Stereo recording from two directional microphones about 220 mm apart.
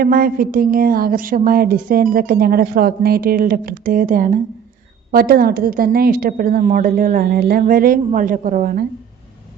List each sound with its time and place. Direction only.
0.0 s a woman's voice: 40° right (ahead or behind)